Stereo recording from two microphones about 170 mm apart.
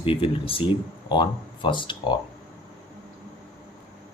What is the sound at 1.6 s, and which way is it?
Speech, 30° left (ahead or behind).